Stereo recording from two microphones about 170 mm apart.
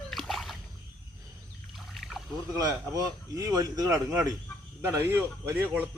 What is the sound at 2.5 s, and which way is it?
A man's voice, 20° right (ahead or behind).